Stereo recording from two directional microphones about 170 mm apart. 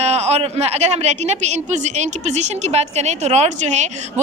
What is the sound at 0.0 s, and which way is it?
A woman's voice, 40° right (ahead or behind).